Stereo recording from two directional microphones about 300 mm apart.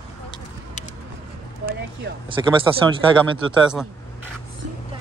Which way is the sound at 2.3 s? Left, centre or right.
Centre.